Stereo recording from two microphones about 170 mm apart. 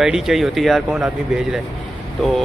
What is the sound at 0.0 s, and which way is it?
Speech, centre (ahead or behind).